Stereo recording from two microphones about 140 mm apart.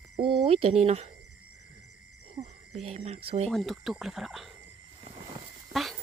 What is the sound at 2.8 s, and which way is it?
Speech, 50° right (ahead or behind).